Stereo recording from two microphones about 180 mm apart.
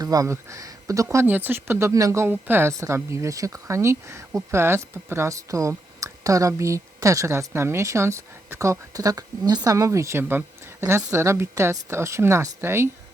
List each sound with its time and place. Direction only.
0.0 s speech: 20° right (ahead or behind)